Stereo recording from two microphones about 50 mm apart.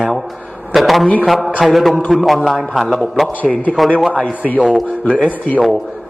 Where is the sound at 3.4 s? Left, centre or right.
Left.